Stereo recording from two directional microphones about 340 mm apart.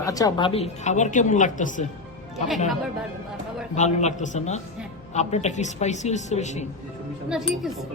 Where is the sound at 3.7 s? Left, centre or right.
Centre.